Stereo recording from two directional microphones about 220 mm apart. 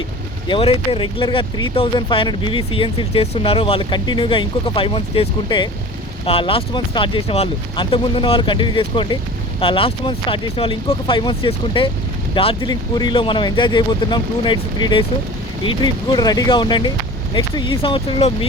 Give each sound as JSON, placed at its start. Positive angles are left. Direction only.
{"t": 0.4, "sound": "speech", "side_deg": 25}